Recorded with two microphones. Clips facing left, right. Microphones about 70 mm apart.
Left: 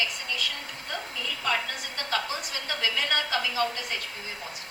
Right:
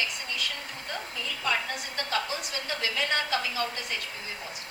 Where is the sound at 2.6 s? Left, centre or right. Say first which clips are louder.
Left 1 dB; left.